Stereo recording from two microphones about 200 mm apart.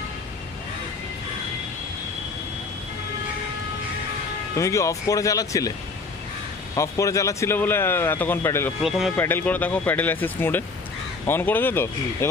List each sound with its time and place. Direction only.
4.6 s speech: 15° left (ahead or behind)
6.7 s speech: 15° left (ahead or behind)
8.8 s speech: centre (ahead or behind)
9.1 s speech: 10° left (ahead or behind)